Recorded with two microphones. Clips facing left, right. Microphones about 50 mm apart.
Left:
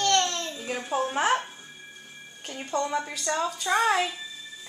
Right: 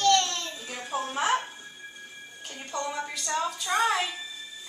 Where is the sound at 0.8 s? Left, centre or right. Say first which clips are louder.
Left 4 dB; centre.